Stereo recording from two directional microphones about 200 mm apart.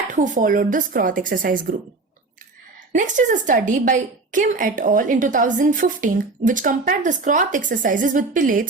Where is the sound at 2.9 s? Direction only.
40° right (ahead or behind).